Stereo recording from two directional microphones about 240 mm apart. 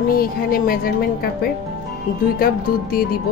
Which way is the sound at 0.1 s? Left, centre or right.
Left.